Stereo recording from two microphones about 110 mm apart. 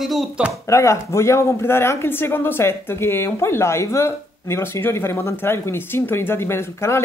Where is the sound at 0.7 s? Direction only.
25° left (ahead or behind).